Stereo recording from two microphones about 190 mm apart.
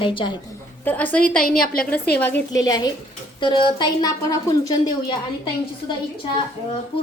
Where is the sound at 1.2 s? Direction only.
50° left (ahead or behind).